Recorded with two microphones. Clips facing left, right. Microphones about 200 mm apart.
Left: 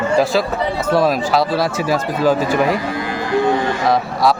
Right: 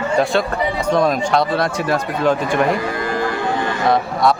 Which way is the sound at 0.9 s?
5° left (ahead or behind).